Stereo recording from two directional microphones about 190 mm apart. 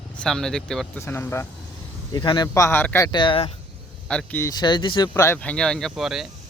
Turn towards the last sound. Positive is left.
turn(degrees=0)  # may be behind; listen again after turning